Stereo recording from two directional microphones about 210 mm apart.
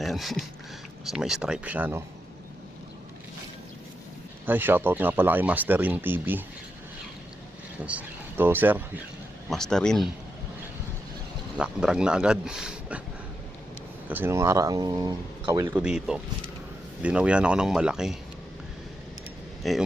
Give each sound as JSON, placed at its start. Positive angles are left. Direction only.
{"t": 0.0, "sound": "speech", "side_deg": 0}
{"t": 4.4, "sound": "speech", "side_deg": -10}
{"t": 7.9, "sound": "speech", "side_deg": -10}
{"t": 9.5, "sound": "speech", "side_deg": 0}
{"t": 11.5, "sound": "speech", "side_deg": -5}
{"t": 14.1, "sound": "speech", "side_deg": -10}
{"t": 15.7, "sound": "speech", "side_deg": -5}
{"t": 19.6, "sound": "speech", "side_deg": 0}